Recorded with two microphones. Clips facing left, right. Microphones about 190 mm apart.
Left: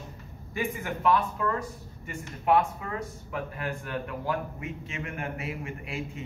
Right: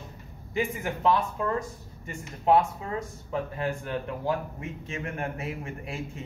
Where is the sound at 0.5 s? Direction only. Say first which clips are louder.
Right 2 dB; 20° right (ahead or behind).